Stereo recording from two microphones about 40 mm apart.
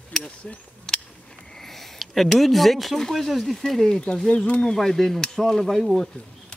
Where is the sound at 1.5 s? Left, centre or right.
Centre.